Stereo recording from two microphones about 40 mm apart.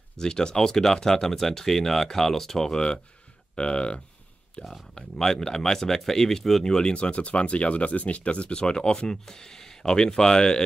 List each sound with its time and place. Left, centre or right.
0.2 s speech: centre
4.9 s speech: centre
9.2 s speech: centre